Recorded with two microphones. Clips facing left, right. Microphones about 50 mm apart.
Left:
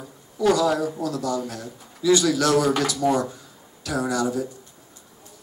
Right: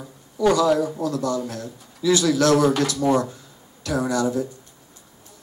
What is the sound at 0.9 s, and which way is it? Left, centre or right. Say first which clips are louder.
Speech: right 2 dB; centre.